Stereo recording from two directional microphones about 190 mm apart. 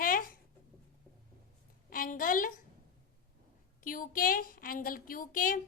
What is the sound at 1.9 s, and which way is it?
Speech, 45° left (ahead or behind).